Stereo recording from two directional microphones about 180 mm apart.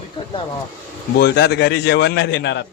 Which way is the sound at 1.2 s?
65° left (ahead or behind).